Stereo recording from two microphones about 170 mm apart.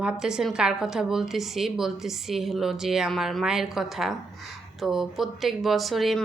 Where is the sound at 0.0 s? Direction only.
5° right (ahead or behind).